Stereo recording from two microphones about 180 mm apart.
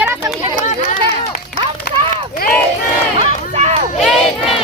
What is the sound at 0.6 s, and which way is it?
Speech, 40° left (ahead or behind).